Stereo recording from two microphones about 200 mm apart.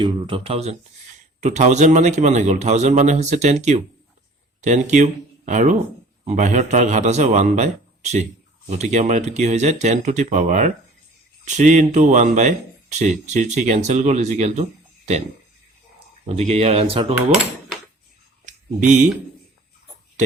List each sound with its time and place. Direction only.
0.0 s a man's voice: 25° right (ahead or behind)
16.3 s a man's voice: 30° right (ahead or behind)
18.4 s a sound: 35° right (ahead or behind)